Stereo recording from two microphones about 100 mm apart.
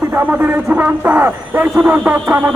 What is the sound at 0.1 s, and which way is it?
Speech, 20° right (ahead or behind).